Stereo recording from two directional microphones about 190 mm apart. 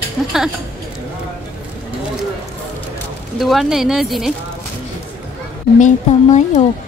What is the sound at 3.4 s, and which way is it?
Speech, centre (ahead or behind).